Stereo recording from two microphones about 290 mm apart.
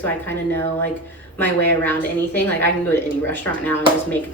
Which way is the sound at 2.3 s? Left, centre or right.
Right.